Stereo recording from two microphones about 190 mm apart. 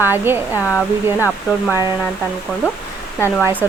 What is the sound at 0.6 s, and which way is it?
Speech, 15° left (ahead or behind).